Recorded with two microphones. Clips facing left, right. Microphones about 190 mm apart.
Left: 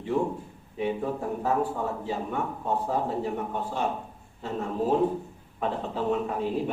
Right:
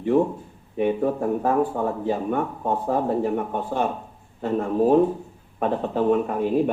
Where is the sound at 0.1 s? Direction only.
55° right (ahead or behind).